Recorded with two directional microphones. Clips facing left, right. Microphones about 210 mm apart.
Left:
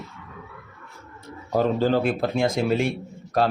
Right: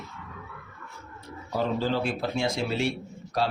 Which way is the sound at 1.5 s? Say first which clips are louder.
Left 6 dB; 45° left (ahead or behind).